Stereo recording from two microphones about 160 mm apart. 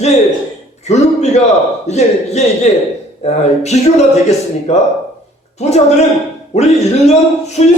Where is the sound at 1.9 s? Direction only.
45° left (ahead or behind).